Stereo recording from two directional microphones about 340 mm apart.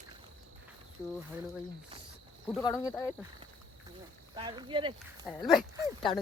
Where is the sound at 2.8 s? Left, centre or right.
Centre.